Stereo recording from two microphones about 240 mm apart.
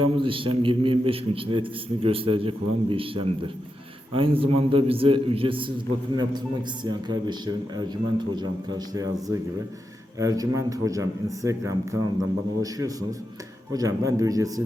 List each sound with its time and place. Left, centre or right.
0.0 s a man's voice: right